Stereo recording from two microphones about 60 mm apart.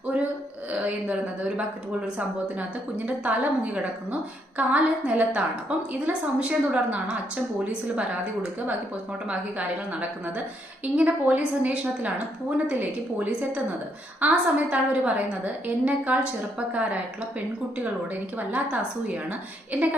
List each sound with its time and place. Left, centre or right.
0.7 s a woman's voice: right
9.9 s a woman's voice: right
18.3 s a woman's voice: right